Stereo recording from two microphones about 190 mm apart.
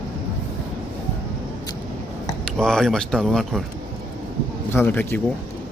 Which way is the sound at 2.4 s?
5° left (ahead or behind).